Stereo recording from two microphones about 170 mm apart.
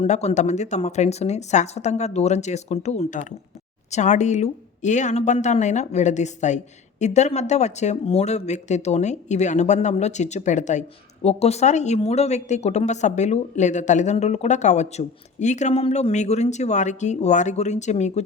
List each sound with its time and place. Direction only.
0.0 s speech: 40° left (ahead or behind)